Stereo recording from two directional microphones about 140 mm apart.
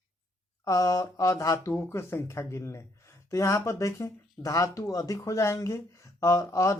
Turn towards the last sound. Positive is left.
turn(degrees=20)  # may be behind; listen again after turning